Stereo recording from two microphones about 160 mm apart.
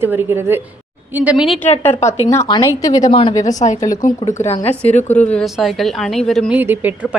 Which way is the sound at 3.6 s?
50° left (ahead or behind).